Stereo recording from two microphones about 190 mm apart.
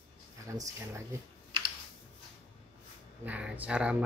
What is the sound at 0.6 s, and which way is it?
Speech, 15° right (ahead or behind).